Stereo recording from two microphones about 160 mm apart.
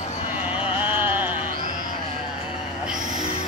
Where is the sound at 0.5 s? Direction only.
10° right (ahead or behind).